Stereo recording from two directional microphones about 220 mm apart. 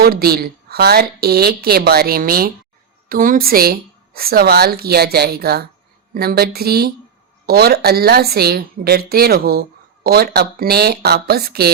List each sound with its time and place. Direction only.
0.0 s a woman's voice: 45° right (ahead or behind)